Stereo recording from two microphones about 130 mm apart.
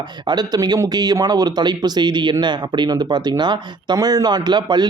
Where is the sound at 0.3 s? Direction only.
30° right (ahead or behind).